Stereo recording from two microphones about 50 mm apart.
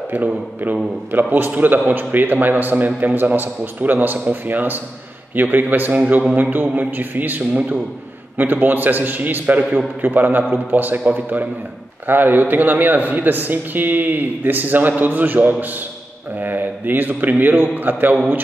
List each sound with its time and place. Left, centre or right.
0.1 s a man's voice: right
9.6 s a man's voice: right
10.0 s a man's voice: right